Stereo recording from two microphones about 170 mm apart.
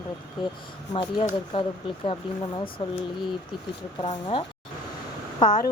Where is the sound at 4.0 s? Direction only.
30° left (ahead or behind).